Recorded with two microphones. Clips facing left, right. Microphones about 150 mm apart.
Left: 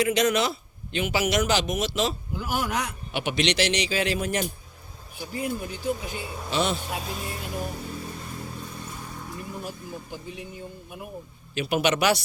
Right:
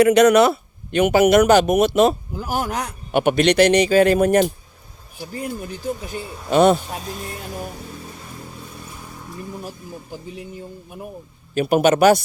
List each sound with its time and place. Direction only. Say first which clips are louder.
0.0 s a man's voice: right 10 dB; 60° right (ahead or behind)
2.4 s a man's voice: right 3 dB; 40° right (ahead or behind)
6.5 s a man's voice: right 12 dB; 50° right (ahead or behind)
11.5 s a man's voice: right 8 dB; 45° right (ahead or behind)